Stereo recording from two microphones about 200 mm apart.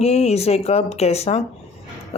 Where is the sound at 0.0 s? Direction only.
35° left (ahead or behind).